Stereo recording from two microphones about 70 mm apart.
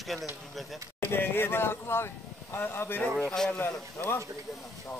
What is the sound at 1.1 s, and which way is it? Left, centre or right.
Speech, left.